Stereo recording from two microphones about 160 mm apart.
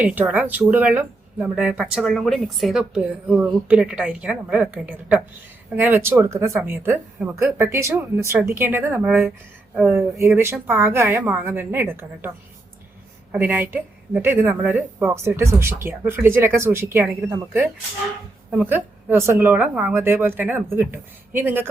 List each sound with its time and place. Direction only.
0.0 s speech: 10° right (ahead or behind)
13.3 s speech: 10° right (ahead or behind)